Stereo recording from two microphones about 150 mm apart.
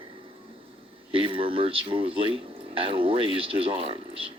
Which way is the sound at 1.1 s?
35° right (ahead or behind).